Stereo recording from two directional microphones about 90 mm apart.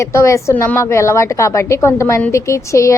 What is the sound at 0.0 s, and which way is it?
A woman's voice, 35° left (ahead or behind).